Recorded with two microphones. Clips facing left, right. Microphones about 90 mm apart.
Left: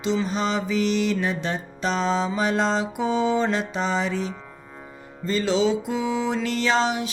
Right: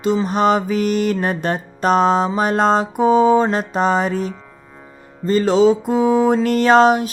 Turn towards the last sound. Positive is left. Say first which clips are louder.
# right 10 dB
turn(degrees=-50)  # may be behind; listen again after turning